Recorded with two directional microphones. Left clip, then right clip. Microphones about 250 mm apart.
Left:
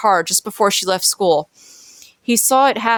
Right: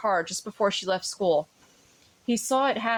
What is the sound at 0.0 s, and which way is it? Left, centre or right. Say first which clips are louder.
Speech: left 11 dB; left.